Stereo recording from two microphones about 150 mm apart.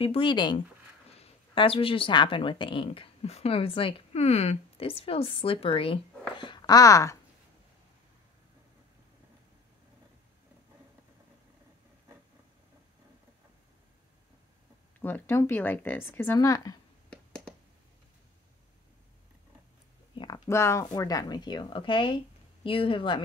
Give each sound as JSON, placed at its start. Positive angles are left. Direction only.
{"t": 0.0, "sound": "speech", "side_deg": 35}
{"t": 15.0, "sound": "speech", "side_deg": 10}
{"t": 17.1, "sound": "a sound", "side_deg": 5}
{"t": 20.2, "sound": "speech", "side_deg": 25}